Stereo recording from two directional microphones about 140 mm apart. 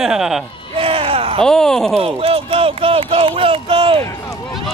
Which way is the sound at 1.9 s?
45° right (ahead or behind).